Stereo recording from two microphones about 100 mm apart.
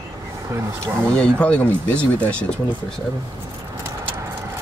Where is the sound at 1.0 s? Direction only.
10° left (ahead or behind).